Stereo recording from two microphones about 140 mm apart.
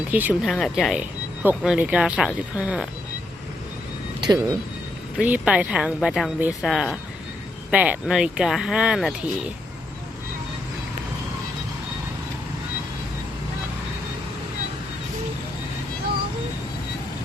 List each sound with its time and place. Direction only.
0.1 s speech: 10° right (ahead or behind)
0.5 s speech: centre (ahead or behind)
4.2 s speech: 30° right (ahead or behind)
5.2 s speech: 10° right (ahead or behind)